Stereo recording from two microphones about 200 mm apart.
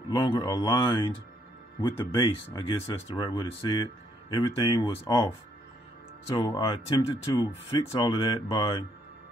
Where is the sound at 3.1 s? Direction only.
20° left (ahead or behind).